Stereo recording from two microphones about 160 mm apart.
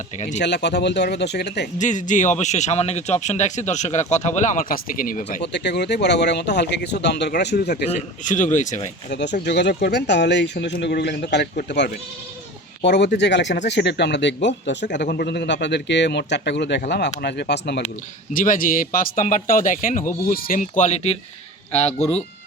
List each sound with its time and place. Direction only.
0.3 s speech: 90° left
1.8 s speech: 50° left (ahead or behind); by 7.9 s 90° left
7.9 s speech: 50° left (ahead or behind)
9.0 s speech: 90° left
18.3 s speech: 60° left (ahead or behind); by 22.1 s 45° left (ahead or behind)